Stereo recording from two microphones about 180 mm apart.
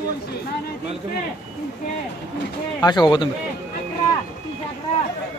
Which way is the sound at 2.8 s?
25° left (ahead or behind).